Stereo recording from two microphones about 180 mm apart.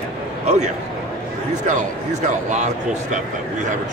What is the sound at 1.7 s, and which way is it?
Speech, 40° right (ahead or behind).